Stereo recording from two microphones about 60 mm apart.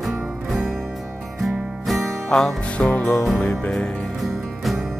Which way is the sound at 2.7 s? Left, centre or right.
Left.